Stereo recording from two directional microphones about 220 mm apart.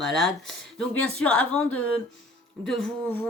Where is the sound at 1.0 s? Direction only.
75° left (ahead or behind).